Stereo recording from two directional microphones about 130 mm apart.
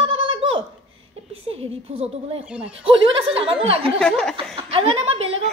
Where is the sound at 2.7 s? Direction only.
45° right (ahead or behind).